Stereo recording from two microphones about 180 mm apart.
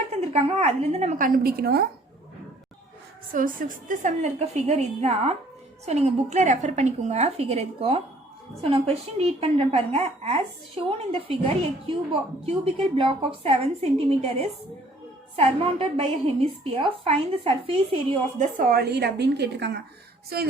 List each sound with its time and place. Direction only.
0.1 s a woman's voice: 35° right (ahead or behind); by 1.9 s 60° right (ahead or behind)
3.3 s a woman's voice: 50° right (ahead or behind); by 17.7 s 30° right (ahead or behind)
18.3 s a woman's voice: 50° right (ahead or behind)